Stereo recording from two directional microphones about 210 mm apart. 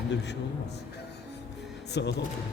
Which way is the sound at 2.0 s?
55° left (ahead or behind).